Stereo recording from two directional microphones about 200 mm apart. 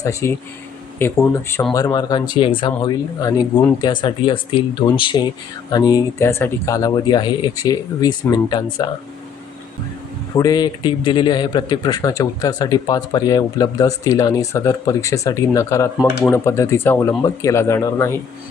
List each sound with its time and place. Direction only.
0.0 s a man's voice: 15° left (ahead or behind)
10.3 s a man's voice: 20° left (ahead or behind)